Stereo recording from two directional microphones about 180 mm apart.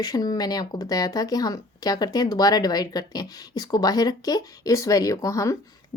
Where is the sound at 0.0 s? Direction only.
20° left (ahead or behind).